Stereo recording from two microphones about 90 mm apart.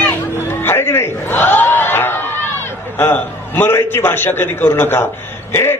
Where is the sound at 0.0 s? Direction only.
25° left (ahead or behind).